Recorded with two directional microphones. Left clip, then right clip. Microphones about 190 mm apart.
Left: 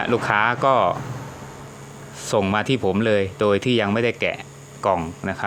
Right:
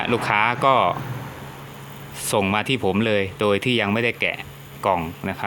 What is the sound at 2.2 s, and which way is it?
Speech, centre (ahead or behind).